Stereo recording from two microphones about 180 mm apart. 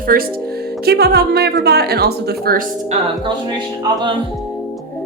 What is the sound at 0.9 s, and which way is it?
Speech, 65° right (ahead or behind).